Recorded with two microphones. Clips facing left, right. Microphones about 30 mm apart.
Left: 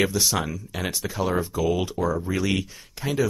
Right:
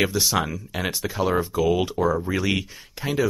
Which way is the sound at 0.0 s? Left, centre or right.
Centre.